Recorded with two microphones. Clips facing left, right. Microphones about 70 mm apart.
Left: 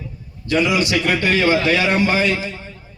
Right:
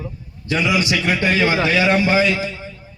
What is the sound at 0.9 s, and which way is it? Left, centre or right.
Speech, left.